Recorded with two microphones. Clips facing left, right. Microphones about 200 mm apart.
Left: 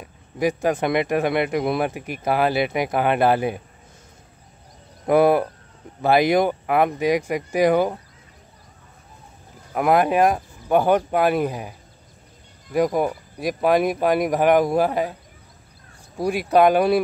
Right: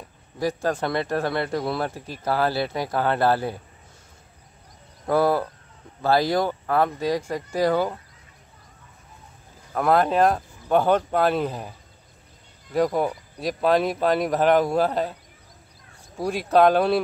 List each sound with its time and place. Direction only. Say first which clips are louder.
0.4 s speech: left 4 dB; 15° left (ahead or behind)
5.0 s speech: left 4 dB; 20° left (ahead or behind)
9.8 s speech: left 2 dB; 15° left (ahead or behind)
12.7 s speech: left 2 dB; 10° left (ahead or behind)
16.2 s speech: left 2 dB; 15° left (ahead or behind)